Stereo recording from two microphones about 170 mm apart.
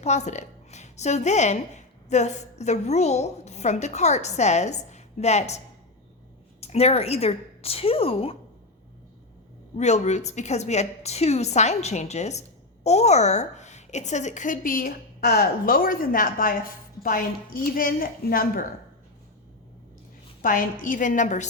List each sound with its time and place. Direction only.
0.0 s a woman's voice: 40° left (ahead or behind)
6.6 s a woman's voice: 40° left (ahead or behind)
9.7 s a woman's voice: 40° left (ahead or behind); by 18.6 s 60° left (ahead or behind)
20.4 s a woman's voice: 50° left (ahead or behind)